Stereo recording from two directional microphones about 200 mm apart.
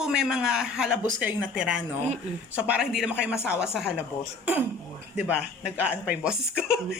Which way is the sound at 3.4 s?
10° left (ahead or behind).